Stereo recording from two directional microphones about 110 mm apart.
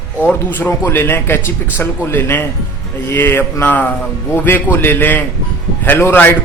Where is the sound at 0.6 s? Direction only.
20° left (ahead or behind).